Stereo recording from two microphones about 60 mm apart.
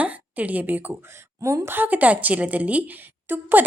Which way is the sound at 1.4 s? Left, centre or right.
Right.